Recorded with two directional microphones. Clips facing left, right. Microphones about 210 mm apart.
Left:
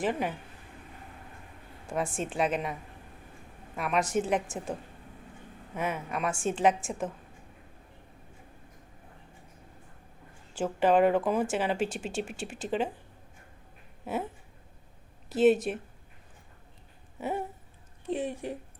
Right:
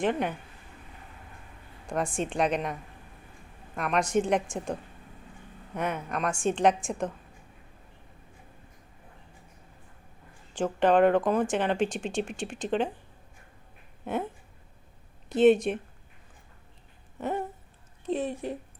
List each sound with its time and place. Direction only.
0.0 s a woman's voice: 5° left (ahead or behind)
2.1 s a woman's voice: 5° left (ahead or behind)
3.8 s a woman's voice: 5° left (ahead or behind)
10.5 s speech: 5° left (ahead or behind)
14.0 s a sound: 5° left (ahead or behind)
15.3 s a woman's voice: 5° left (ahead or behind)
17.2 s a sound: 10° left (ahead or behind)
18.0 s speech: 15° left (ahead or behind)